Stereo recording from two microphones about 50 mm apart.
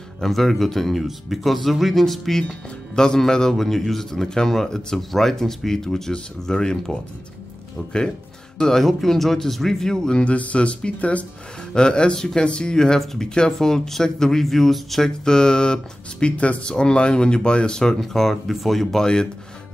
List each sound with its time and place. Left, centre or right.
0.2 s speech: centre
8.5 s speech: centre
10.2 s speech: left
11.7 s speech: centre